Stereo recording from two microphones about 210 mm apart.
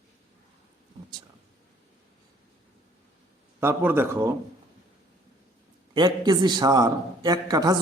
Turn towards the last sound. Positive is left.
turn(degrees=-20)  # may be behind; listen again after turning